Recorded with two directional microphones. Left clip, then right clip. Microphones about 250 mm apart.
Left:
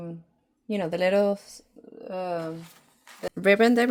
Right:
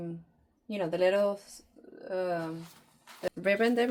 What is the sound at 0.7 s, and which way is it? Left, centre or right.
Speech, left.